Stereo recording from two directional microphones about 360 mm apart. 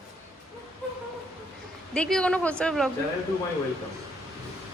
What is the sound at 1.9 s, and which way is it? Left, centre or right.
A woman's voice, centre.